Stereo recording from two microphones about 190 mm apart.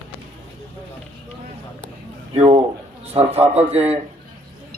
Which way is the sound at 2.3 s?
35° right (ahead or behind).